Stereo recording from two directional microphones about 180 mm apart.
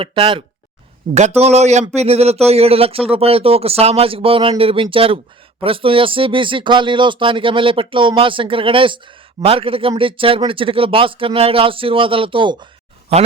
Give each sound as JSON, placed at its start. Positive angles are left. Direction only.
{"t": 0.0, "sound": "speech", "side_deg": -30}